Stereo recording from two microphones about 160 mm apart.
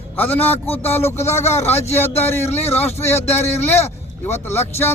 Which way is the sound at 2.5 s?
40° left (ahead or behind).